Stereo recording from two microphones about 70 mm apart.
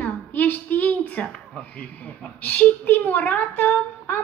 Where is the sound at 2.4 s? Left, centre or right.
Left.